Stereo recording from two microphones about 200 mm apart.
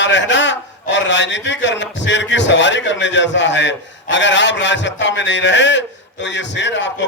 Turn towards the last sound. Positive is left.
turn(degrees=65)  # may be behind; listen again after turning